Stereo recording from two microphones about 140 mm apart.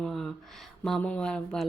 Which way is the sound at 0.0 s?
5° left (ahead or behind).